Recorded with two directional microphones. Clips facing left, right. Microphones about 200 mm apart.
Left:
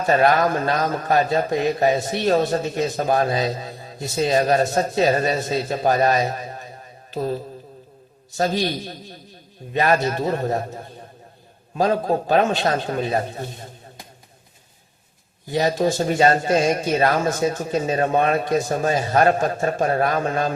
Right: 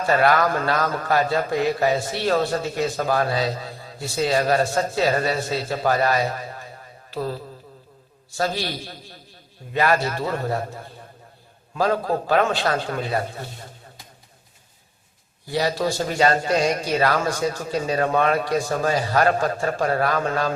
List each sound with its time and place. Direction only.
0.0 s a man's voice: 20° left (ahead or behind)
7.1 s mantra: 20° left (ahead or behind)
8.4 s a man's voice: 20° left (ahead or behind)
15.4 s a man's voice: 20° left (ahead or behind)